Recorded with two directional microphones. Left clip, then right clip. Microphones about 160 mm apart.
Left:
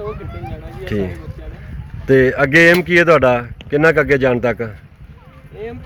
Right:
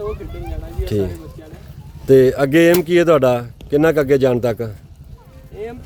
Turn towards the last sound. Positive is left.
turn(degrees=-15)  # may be behind; listen again after turning